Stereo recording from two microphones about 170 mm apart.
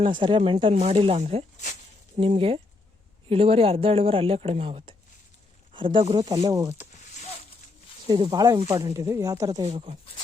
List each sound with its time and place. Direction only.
0.0 s a woman's voice: 30° right (ahead or behind)
8.0 s speech: 30° right (ahead or behind)
9.6 s a woman's voice: 35° right (ahead or behind)